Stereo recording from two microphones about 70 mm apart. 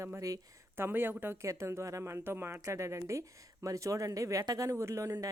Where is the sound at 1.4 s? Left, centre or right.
Right.